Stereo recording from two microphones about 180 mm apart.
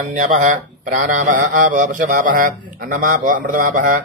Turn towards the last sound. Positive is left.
turn(degrees=-50)  # may be behind; listen again after turning